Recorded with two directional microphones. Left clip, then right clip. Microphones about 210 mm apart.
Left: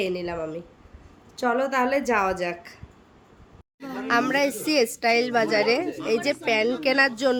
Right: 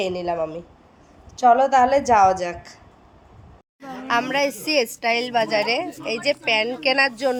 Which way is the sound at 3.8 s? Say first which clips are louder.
Right 1 dB; 10° left (ahead or behind).